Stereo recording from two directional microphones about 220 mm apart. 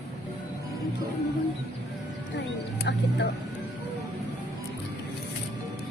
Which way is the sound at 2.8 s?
50° left (ahead or behind).